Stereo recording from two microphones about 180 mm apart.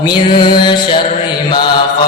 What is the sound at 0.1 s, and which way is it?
Music, 25° left (ahead or behind).